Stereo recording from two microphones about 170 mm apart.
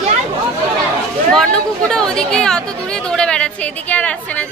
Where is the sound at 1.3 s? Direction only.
5° left (ahead or behind).